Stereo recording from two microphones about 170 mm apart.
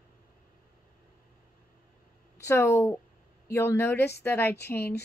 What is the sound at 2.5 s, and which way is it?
Speech, 15° left (ahead or behind).